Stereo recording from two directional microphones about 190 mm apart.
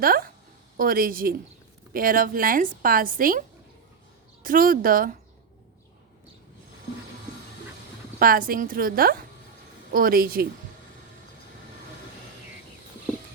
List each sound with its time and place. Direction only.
0.0 s speech: 50° right (ahead or behind)
4.4 s speech: 45° right (ahead or behind)
8.2 s speech: 50° right (ahead or behind)